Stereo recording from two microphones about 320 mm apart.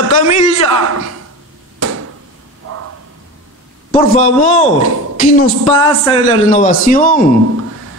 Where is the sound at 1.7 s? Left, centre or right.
Right.